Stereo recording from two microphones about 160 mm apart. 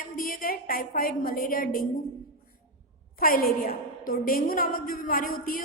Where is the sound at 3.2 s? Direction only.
65° left (ahead or behind).